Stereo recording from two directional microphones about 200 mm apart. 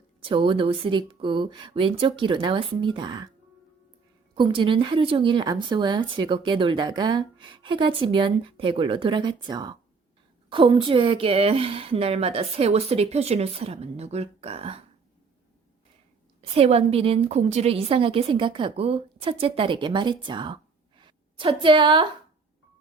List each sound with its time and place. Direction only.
0.2 s a woman's voice: 25° right (ahead or behind)
4.4 s a woman's voice: 25° right (ahead or behind)
16.4 s a woman's voice: 30° right (ahead or behind)
21.0 s a sound: 25° right (ahead or behind)